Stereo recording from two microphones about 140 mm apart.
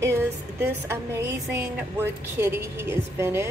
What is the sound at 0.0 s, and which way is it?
A woman's voice, 20° right (ahead or behind).